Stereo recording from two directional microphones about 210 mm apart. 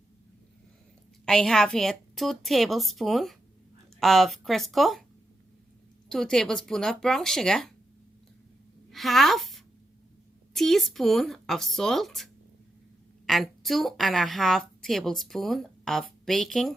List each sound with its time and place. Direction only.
1.2 s a woman's voice: 5° left (ahead or behind)
6.1 s a woman's voice: centre (ahead or behind)
8.9 s a woman's voice: centre (ahead or behind)